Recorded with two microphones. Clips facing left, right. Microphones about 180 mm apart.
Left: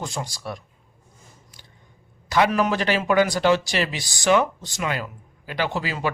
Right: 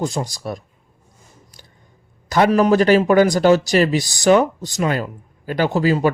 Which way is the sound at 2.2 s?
45° right (ahead or behind).